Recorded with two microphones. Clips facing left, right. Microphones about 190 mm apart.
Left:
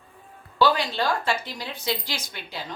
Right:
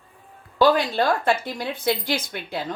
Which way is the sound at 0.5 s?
50° right (ahead or behind).